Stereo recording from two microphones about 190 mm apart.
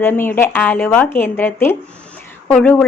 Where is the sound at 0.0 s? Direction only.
10° left (ahead or behind).